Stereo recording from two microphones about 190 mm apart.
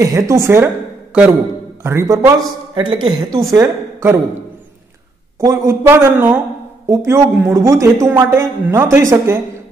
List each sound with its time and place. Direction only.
0.0 s speech: 15° right (ahead or behind)
1.8 s speech: 15° right (ahead or behind)
5.4 s speech: 15° right (ahead or behind)